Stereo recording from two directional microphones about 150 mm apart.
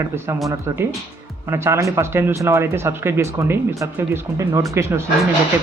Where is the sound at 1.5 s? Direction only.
20° right (ahead or behind).